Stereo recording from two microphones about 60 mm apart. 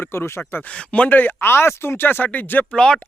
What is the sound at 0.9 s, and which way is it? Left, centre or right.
Speech, left.